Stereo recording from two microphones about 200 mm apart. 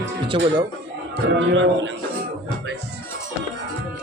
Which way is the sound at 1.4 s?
70° right (ahead or behind).